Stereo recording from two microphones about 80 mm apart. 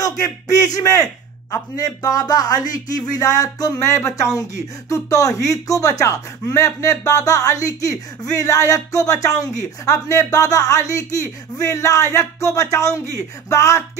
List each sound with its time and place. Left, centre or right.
0.0 s speech: left